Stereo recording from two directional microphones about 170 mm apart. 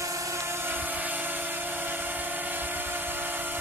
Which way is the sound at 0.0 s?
20° right (ahead or behind).